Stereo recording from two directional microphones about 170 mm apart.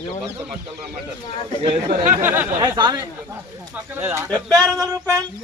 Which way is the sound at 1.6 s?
35° right (ahead or behind).